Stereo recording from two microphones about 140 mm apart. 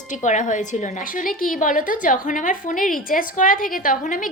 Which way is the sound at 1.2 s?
75° left (ahead or behind).